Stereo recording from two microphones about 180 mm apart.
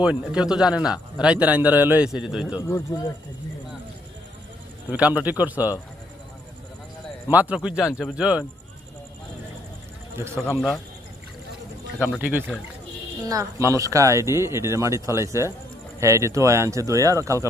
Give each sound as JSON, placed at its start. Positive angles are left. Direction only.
{"t": 0.0, "sound": "a man's voice", "side_deg": -5}
{"t": 4.9, "sound": "speech", "side_deg": -5}
{"t": 7.3, "sound": "a man's voice", "side_deg": -10}
{"t": 10.2, "sound": "speech", "side_deg": -15}
{"t": 10.4, "sound": "a man's voice", "side_deg": 10}
{"t": 11.9, "sound": "a man's voice", "side_deg": 10}
{"t": 12.2, "sound": "speech", "side_deg": -10}